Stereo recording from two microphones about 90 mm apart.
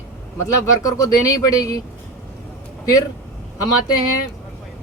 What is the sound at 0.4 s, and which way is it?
Speech, 40° left (ahead or behind).